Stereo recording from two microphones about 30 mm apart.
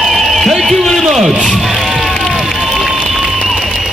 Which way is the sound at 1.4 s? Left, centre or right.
Centre.